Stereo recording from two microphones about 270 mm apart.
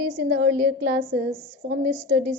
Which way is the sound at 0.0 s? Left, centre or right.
Right.